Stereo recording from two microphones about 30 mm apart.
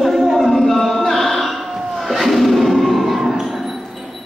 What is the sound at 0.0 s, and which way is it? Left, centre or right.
Music, centre.